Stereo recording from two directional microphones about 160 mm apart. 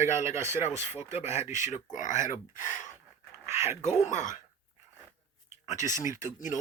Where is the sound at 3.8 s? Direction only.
50° left (ahead or behind).